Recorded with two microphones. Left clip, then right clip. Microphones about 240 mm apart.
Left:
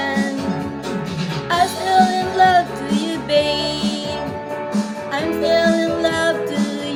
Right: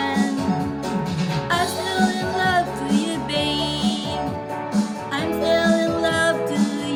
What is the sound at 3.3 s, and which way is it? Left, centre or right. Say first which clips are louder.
Music: left 7 dB; left.